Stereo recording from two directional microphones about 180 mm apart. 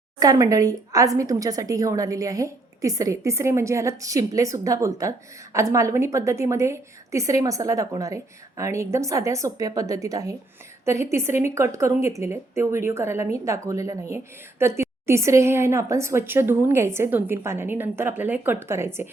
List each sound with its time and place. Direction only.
0.2 s a woman's voice: 20° right (ahead or behind)